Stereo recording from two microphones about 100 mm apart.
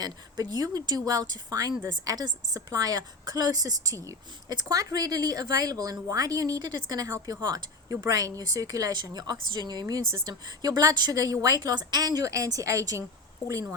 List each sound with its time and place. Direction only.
0.0 s a woman's voice: 40° right (ahead or behind)